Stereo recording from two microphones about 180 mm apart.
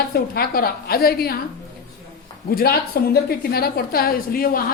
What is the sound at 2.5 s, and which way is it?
A woman's voice, 60° left (ahead or behind).